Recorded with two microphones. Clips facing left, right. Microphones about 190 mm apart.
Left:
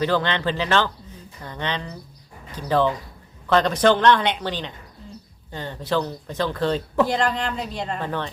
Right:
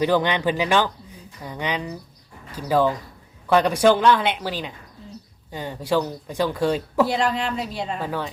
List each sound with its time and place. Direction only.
0.0 s speech: 15° right (ahead or behind)